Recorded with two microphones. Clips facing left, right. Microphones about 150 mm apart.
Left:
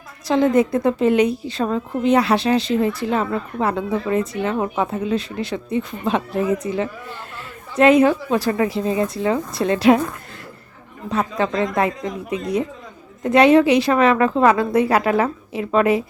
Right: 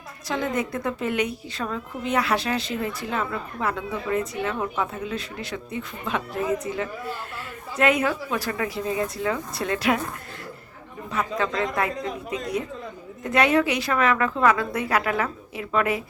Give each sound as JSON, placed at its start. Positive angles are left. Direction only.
{"t": 0.3, "sound": "a woman's voice", "side_deg": 30}
{"t": 11.1, "sound": "a woman's voice", "side_deg": 30}